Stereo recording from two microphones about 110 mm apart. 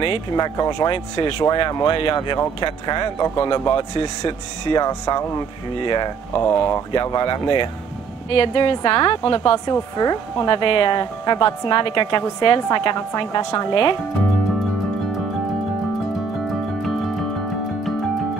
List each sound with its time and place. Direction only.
0.0 s speech: 50° left (ahead or behind)
1.4 s speech: 35° left (ahead or behind)
6.3 s speech: 25° left (ahead or behind)
6.9 s speech: 40° left (ahead or behind)
8.3 s speech: 55° left (ahead or behind)